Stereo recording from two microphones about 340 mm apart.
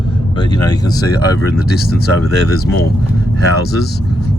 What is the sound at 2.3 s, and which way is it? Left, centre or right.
Speech, left.